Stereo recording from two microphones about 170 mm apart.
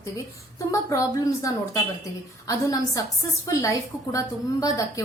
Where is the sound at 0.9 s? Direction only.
20° left (ahead or behind).